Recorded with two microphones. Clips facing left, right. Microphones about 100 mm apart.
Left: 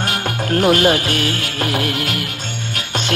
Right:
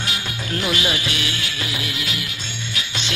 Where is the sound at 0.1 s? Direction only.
50° left (ahead or behind).